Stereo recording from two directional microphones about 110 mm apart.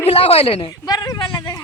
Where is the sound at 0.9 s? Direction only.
35° left (ahead or behind).